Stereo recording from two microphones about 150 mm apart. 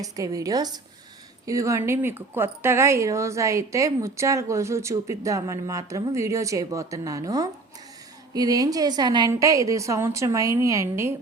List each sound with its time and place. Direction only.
0.0 s speech: 20° right (ahead or behind)